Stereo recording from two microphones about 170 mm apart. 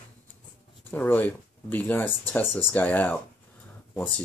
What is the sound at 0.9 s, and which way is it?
Speech, 10° left (ahead or behind).